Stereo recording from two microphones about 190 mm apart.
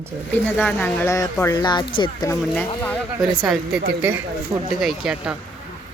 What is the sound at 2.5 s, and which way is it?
Speech, 5° left (ahead or behind).